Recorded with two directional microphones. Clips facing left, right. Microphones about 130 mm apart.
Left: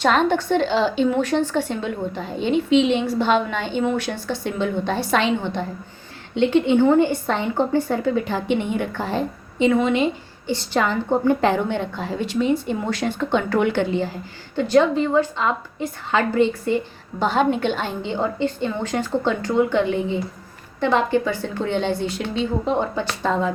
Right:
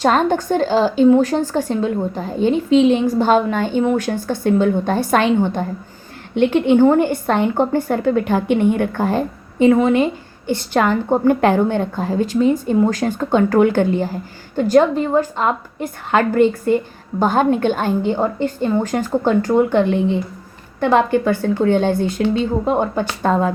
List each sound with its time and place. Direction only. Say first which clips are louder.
0.0 s a woman's voice: right 3 dB; 40° right (ahead or behind)
20.8 s a woman's voice: right 4 dB; 55° right (ahead or behind)